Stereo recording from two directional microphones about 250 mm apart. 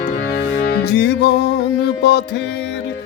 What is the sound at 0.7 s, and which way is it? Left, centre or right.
Music, left.